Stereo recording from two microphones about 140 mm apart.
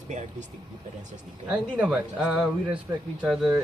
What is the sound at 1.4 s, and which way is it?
Speech, 5° right (ahead or behind).